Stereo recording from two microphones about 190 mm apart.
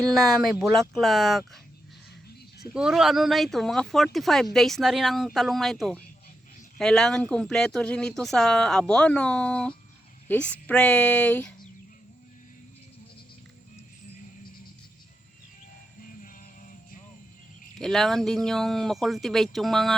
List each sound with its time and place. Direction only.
0.0 s speech: centre (ahead or behind)
2.7 s speech: 5° right (ahead or behind)
16.2 s music: 45° left (ahead or behind)
17.7 s speech: centre (ahead or behind)